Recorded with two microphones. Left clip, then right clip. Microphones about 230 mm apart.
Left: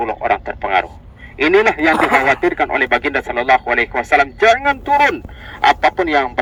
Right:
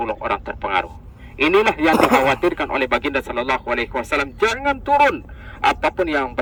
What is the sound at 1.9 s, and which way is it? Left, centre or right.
Speech, right.